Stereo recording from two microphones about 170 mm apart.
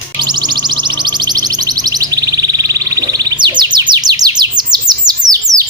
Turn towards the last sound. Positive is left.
turn(degrees=-25)  # may be behind; listen again after turning